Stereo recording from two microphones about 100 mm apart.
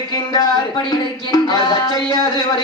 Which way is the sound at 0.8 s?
40° left (ahead or behind).